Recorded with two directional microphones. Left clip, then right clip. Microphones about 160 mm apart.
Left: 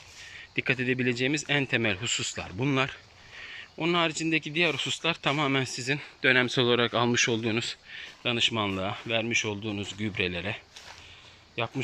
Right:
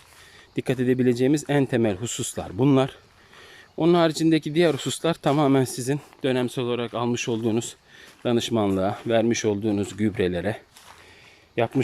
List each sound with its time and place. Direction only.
0.5 s speech: 45° right (ahead or behind); by 6.6 s 30° right (ahead or behind)
6.6 s speech: 15° right (ahead or behind)
7.5 s speech: 45° right (ahead or behind)
11.6 s speech: 65° right (ahead or behind)